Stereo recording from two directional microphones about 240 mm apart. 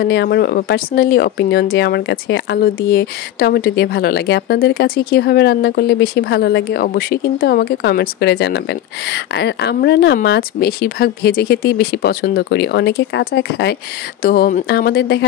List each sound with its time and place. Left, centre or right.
0.0 s speech: left